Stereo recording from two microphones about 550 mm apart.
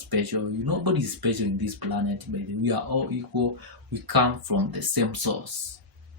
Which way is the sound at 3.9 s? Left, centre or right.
Right.